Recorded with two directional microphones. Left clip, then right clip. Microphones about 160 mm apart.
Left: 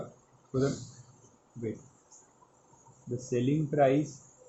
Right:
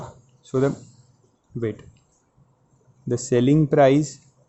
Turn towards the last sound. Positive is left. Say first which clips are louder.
# right 10 dB
turn(degrees=-90)